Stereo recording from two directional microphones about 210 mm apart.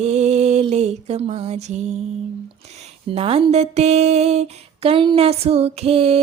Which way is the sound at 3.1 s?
30° right (ahead or behind).